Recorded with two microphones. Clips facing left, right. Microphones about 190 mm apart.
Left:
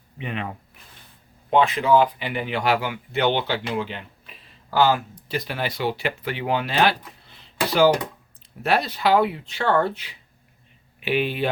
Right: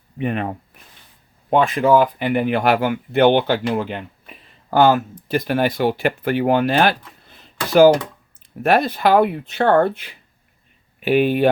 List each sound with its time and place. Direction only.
0.2 s speech: 50° right (ahead or behind)
7.3 s a sound: 50° right (ahead or behind)
8.6 s speech: 55° right (ahead or behind)